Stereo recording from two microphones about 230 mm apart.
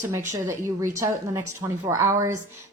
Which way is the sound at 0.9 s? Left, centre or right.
Centre.